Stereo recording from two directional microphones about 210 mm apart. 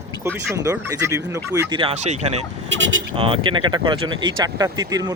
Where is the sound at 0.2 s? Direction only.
10° right (ahead or behind).